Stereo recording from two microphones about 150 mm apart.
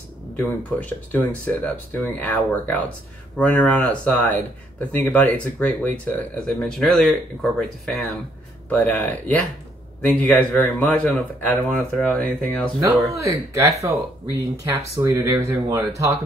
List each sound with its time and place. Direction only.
0.4 s speech: 10° left (ahead or behind)
12.9 s speech: 20° right (ahead or behind)